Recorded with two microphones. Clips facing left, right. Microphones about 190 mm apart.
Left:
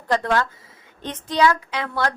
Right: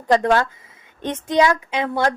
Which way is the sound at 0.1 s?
20° right (ahead or behind).